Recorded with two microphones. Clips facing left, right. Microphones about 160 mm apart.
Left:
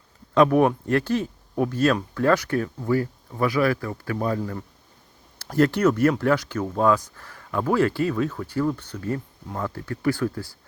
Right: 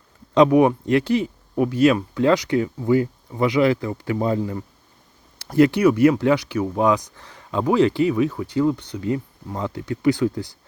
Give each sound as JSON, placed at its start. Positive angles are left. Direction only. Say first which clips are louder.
{"t": 0.3, "sound": "speech", "louder": "right 3 dB", "side_deg": -15}